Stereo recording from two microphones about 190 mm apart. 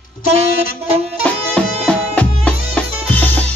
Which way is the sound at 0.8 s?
35° right (ahead or behind).